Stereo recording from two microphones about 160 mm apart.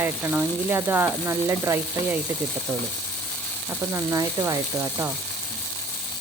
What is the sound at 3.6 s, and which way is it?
Speech, 20° right (ahead or behind).